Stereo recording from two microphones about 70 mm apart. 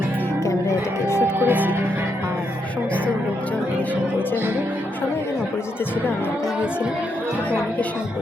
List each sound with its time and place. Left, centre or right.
0.4 s music: left
1.4 s speech: right